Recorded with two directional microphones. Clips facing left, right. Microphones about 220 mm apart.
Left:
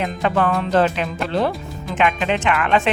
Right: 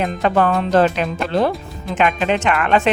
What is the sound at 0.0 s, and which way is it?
Speech, 45° right (ahead or behind).